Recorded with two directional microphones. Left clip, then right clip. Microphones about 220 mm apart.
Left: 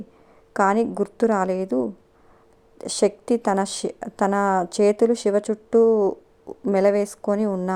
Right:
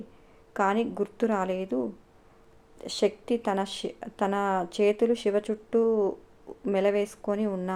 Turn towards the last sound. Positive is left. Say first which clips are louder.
# left 6 dB
turn(degrees=30)  # may be behind; listen again after turning